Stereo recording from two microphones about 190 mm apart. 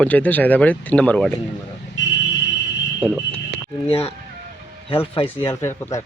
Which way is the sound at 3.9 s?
30° left (ahead or behind).